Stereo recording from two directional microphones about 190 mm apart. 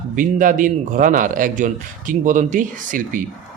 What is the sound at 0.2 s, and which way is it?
Speech, 45° right (ahead or behind).